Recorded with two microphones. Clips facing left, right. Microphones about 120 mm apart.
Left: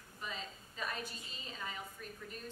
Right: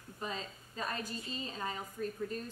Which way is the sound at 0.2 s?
40° right (ahead or behind).